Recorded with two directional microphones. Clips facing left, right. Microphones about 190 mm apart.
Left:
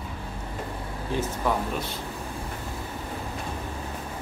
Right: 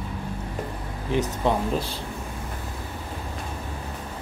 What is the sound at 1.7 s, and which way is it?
Speech, 30° right (ahead or behind).